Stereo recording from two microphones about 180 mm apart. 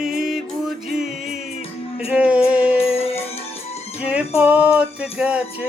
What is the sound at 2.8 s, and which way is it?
Music, 35° left (ahead or behind).